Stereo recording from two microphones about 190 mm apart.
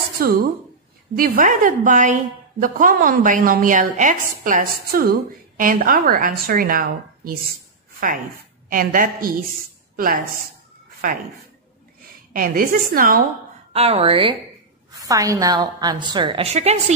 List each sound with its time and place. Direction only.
0.2 s a woman's voice: 50° right (ahead or behind)
8.6 s a woman's voice: 45° right (ahead or behind)
12.3 s a woman's voice: 45° right (ahead or behind)
13.7 s speech: 30° right (ahead or behind)
14.9 s a woman's voice: 20° right (ahead or behind); by 16.8 s 35° right (ahead or behind)